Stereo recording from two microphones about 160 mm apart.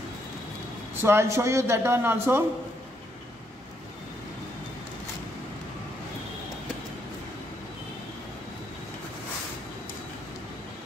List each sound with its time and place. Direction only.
1.0 s a man's voice: 15° right (ahead or behind)